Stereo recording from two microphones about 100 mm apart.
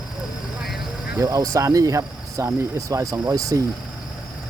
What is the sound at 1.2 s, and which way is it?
Speech, 35° right (ahead or behind).